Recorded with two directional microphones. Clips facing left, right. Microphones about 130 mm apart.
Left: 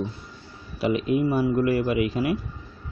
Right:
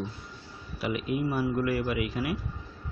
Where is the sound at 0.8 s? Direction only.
25° left (ahead or behind).